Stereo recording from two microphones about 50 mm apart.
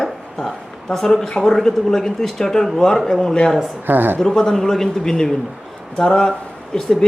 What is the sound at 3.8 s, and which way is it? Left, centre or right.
Speech, right.